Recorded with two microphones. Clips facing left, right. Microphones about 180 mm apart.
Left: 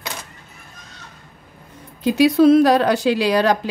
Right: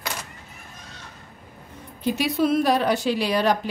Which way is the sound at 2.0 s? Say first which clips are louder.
Left 9 dB; 90° left.